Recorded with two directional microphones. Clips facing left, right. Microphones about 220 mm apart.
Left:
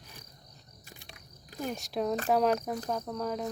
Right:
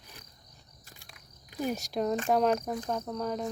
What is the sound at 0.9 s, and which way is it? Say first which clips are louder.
Cricket: left 5 dB; 20° left (ahead or behind).